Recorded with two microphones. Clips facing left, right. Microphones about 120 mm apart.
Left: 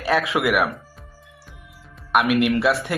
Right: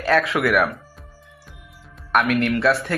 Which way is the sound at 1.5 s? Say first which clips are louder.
Even; centre (ahead or behind).